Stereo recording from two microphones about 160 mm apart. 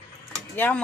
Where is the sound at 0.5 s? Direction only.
10° left (ahead or behind).